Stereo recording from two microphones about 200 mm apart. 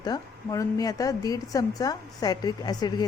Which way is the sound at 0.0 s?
15° left (ahead or behind).